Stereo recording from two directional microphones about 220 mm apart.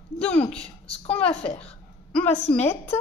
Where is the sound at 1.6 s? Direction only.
5° left (ahead or behind).